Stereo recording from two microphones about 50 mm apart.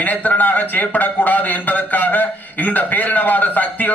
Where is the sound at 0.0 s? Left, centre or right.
Left.